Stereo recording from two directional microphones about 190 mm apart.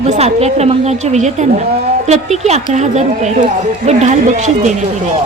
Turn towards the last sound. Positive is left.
turn(degrees=-40)  # may be behind; listen again after turning